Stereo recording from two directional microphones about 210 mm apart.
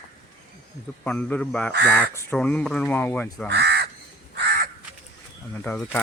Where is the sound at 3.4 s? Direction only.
55° right (ahead or behind).